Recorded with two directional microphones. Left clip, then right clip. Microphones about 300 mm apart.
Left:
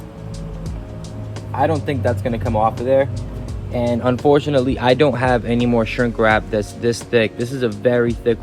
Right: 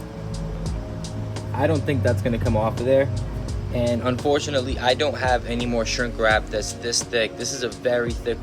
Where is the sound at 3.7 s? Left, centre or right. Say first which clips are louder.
Left 4 dB; centre.